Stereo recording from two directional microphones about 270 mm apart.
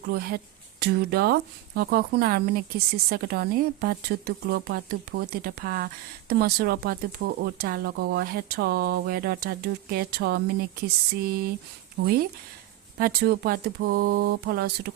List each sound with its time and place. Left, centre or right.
0.1 s a woman's voice: right